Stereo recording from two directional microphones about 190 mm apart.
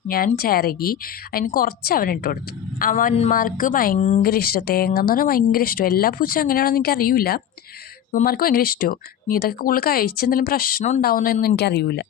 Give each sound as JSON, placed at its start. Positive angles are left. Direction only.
{"t": 0.3, "sound": "speech", "side_deg": 50}
{"t": 4.2, "sound": "speech", "side_deg": 50}